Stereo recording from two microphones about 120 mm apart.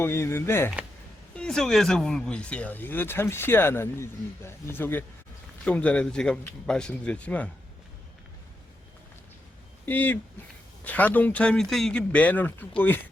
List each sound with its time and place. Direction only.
0.0 s speech: 20° left (ahead or behind)
1.4 s speech: 5° left (ahead or behind)
9.8 s speech: 15° left (ahead or behind)